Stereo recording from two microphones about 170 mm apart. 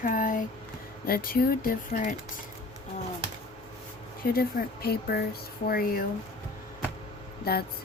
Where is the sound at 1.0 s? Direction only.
60° left (ahead or behind).